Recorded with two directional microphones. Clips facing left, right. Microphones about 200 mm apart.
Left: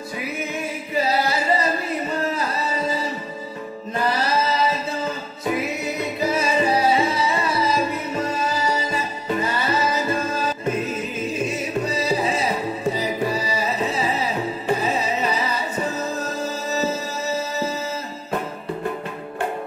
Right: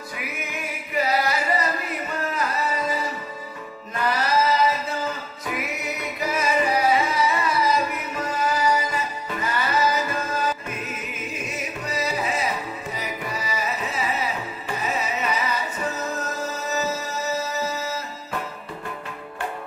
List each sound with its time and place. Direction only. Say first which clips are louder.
0.2 s singing: left 6 dB; 30° left (ahead or behind)
3.9 s music: left 1 dB; 30° left (ahead or behind)